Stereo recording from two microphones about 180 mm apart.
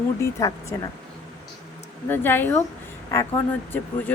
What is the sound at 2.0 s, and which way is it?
Speech, 10° left (ahead or behind).